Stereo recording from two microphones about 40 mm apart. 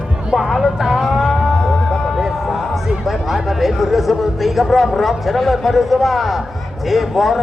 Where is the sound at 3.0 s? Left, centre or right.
Centre.